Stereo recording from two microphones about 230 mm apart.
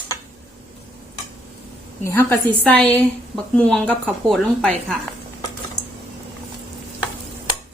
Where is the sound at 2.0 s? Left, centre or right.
Centre.